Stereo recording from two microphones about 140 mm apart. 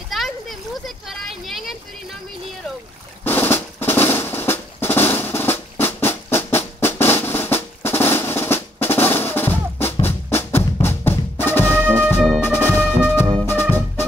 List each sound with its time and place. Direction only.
0.1 s a sound: centre (ahead or behind)
3.3 s drum roll: 15° left (ahead or behind)
10.0 s music: 15° left (ahead or behind)